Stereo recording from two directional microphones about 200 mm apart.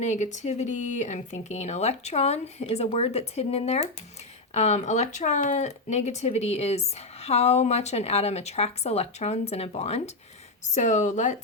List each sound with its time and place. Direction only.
0.0 s speech: 35° left (ahead or behind)